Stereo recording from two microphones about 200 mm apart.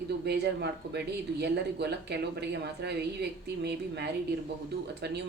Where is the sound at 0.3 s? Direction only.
55° right (ahead or behind).